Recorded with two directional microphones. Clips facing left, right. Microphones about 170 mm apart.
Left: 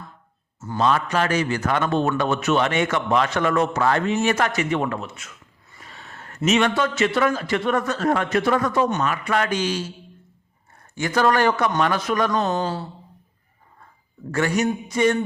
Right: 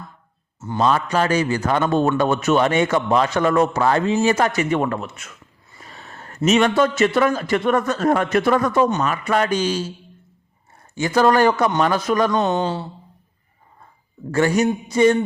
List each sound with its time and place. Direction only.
0.8 s a man's voice: 35° right (ahead or behind)
10.9 s a man's voice: 30° right (ahead or behind)
14.3 s a man's voice: 30° right (ahead or behind)